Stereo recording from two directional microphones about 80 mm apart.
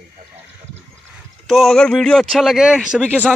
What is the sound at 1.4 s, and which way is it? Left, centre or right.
Speech, centre.